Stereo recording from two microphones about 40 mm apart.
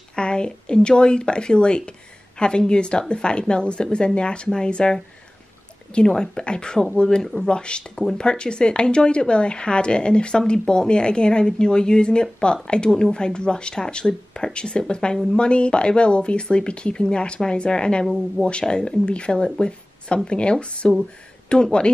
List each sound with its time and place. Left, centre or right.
0.1 s a woman's voice: left